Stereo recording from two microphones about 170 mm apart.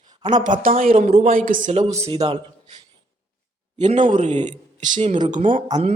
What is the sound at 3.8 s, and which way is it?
Speech, 30° right (ahead or behind).